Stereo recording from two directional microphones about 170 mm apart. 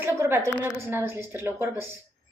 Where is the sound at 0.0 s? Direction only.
15° right (ahead or behind).